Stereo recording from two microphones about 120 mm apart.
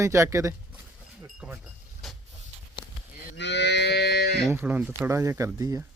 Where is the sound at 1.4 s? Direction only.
10° right (ahead or behind).